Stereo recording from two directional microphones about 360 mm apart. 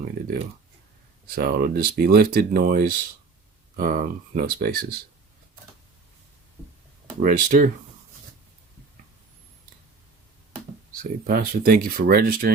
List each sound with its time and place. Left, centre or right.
1.4 s speech: right
7.2 s speech: right
11.0 s speech: right